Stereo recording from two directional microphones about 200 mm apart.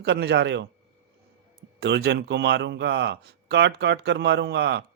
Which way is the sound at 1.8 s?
60° right (ahead or behind).